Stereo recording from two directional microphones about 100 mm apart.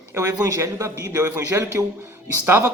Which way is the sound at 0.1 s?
30° right (ahead or behind).